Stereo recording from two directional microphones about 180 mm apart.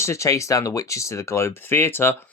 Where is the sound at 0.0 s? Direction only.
15° left (ahead or behind).